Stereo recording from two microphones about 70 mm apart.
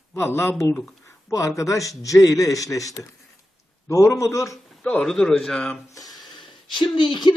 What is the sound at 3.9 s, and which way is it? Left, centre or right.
Speech, left.